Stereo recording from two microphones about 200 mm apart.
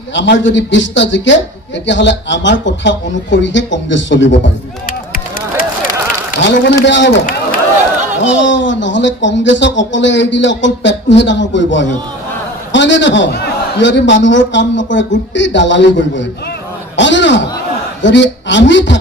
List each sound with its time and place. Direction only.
0.1 s speech: 65° left (ahead or behind)
6.4 s speech: 65° left (ahead or behind)
8.2 s a man's voice: 65° left (ahead or behind)